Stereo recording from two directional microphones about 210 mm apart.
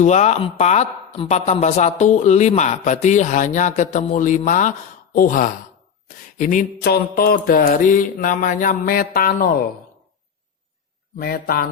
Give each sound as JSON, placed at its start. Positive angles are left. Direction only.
{"t": 0.0, "sound": "speech", "side_deg": 35}
{"t": 6.8, "sound": "speech", "side_deg": 45}
{"t": 11.2, "sound": "speech", "side_deg": 45}